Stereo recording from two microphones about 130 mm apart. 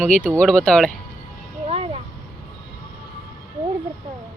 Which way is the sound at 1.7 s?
45° right (ahead or behind).